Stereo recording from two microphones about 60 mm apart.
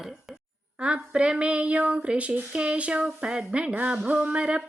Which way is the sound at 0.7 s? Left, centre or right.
Centre.